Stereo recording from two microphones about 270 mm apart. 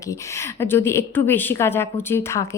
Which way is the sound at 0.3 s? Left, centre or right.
Centre.